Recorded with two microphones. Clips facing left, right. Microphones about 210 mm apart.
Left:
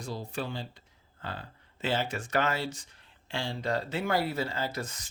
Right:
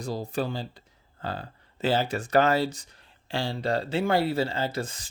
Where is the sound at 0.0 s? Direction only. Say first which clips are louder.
Right 6 dB; 40° right (ahead or behind).